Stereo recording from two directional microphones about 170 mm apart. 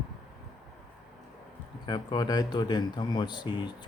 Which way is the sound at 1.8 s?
25° left (ahead or behind).